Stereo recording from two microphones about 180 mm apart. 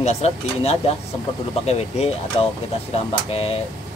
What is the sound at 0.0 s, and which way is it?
Speech, 35° left (ahead or behind).